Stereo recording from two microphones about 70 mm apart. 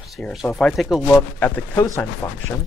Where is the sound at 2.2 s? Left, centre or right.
Left.